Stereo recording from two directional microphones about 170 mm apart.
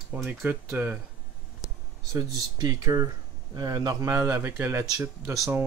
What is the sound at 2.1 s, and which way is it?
Speech, 20° right (ahead or behind).